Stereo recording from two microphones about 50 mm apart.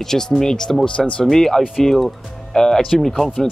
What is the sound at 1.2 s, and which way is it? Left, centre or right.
Speech, centre.